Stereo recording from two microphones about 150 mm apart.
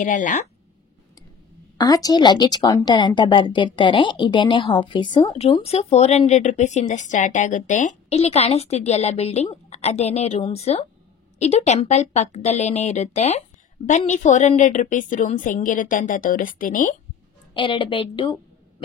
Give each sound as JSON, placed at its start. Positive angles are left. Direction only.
{"t": 0.0, "sound": "speech", "side_deg": 55}
{"t": 1.8, "sound": "a woman's voice", "side_deg": 25}
{"t": 17.6, "sound": "a woman's voice", "side_deg": 35}